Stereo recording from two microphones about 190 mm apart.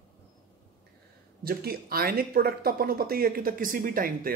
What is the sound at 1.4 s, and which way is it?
Speech, 55° right (ahead or behind).